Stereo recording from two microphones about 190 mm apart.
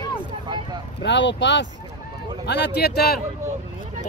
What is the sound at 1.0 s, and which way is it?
Speech, 65° left (ahead or behind).